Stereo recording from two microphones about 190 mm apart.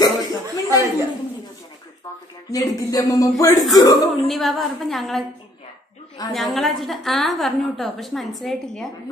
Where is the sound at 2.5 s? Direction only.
20° left (ahead or behind).